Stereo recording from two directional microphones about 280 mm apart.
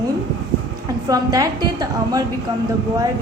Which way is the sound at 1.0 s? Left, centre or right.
Centre.